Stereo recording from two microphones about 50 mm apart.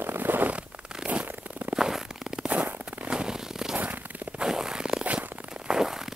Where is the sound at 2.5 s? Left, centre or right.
Right.